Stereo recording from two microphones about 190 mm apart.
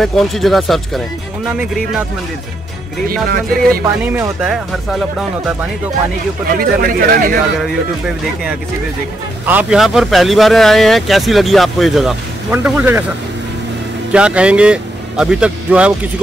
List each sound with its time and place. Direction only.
0.0 s speech: centre (ahead or behind)
3.1 s speech: 50° right (ahead or behind)
4.0 s speech: 10° right (ahead or behind)
6.6 s speech: 50° right (ahead or behind)
9.5 s speech: 5° right (ahead or behind)
14.1 s speech: 5° right (ahead or behind)